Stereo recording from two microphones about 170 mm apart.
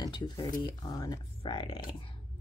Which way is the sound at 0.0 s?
25° left (ahead or behind).